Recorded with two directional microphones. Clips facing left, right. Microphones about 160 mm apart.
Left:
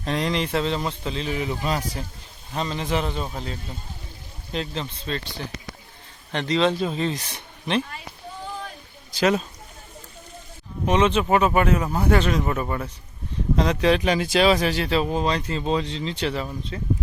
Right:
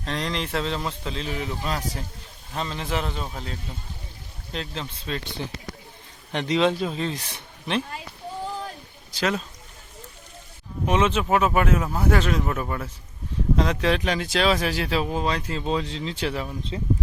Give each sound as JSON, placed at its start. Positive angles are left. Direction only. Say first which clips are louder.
{"t": 0.0, "sound": "speech", "louder": "left 4 dB", "side_deg": 10}
{"t": 6.3, "sound": "speech", "louder": "even", "side_deg": -10}
{"t": 9.1, "sound": "speech", "louder": "left 5 dB", "side_deg": 15}
{"t": 10.8, "sound": "speech", "louder": "left 2 dB", "side_deg": -5}